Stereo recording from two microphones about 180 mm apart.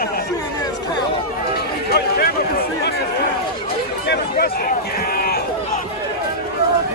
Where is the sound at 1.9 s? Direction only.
60° left (ahead or behind).